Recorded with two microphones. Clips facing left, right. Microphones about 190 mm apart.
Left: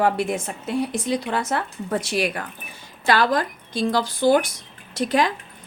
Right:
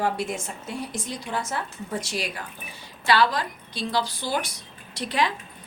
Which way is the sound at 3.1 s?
50° left (ahead or behind).